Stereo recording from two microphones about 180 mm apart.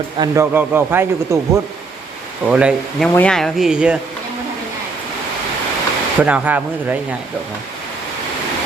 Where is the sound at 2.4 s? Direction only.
5° right (ahead or behind).